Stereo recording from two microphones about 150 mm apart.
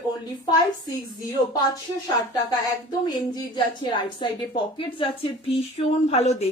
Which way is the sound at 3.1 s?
30° left (ahead or behind).